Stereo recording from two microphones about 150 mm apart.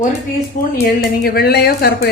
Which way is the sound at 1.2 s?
90° left.